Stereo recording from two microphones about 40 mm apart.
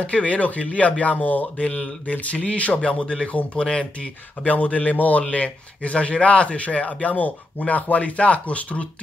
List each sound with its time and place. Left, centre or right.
0.0 s a man's voice: left
1.6 s a man's voice: left
4.5 s a man's voice: left